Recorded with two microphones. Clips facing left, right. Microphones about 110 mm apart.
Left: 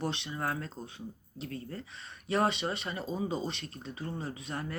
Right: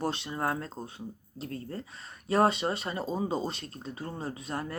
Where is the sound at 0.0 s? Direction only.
35° right (ahead or behind).